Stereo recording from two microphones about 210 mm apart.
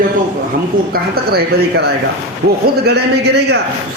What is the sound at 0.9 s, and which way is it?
Speech, 45° right (ahead or behind).